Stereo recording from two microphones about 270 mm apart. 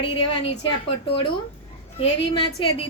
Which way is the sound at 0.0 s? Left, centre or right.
Centre.